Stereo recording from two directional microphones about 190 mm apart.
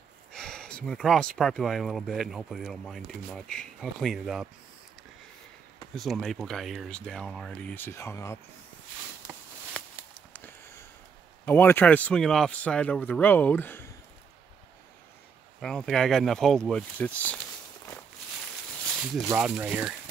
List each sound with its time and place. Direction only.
0.3 s speech: 5° left (ahead or behind)
5.9 s speech: centre (ahead or behind)
9.2 s a sound: 15° left (ahead or behind)
9.8 s a sound: 5° left (ahead or behind)
11.4 s a man's voice: 10° left (ahead or behind)
15.6 s speech: 5° left (ahead or behind)
18.9 s snake: centre (ahead or behind)
19.2 s speech: 5° right (ahead or behind)